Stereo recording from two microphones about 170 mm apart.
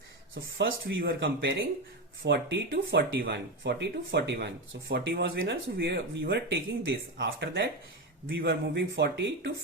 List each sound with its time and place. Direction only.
0.6 s speech: 75° right (ahead or behind)